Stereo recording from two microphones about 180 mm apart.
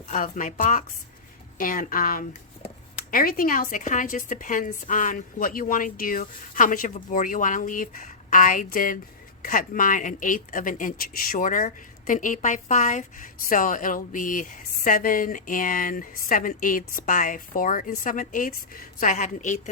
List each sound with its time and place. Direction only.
0.1 s a woman's voice: 45° left (ahead or behind)